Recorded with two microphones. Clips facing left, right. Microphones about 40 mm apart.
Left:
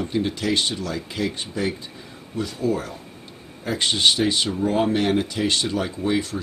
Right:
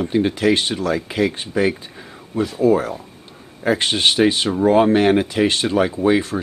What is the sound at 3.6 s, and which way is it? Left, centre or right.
Speech, right.